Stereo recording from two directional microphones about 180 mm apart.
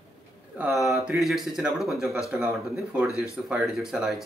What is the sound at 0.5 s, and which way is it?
A man's voice, 5° right (ahead or behind).